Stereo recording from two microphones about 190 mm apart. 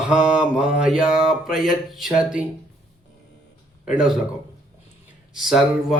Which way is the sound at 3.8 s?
5° right (ahead or behind).